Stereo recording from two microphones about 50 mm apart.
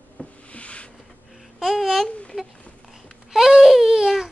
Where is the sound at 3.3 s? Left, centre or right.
Centre.